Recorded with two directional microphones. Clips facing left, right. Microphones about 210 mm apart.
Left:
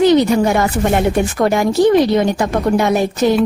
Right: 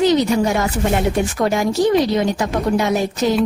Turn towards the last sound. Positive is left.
turn(degrees=60)  # may be behind; listen again after turning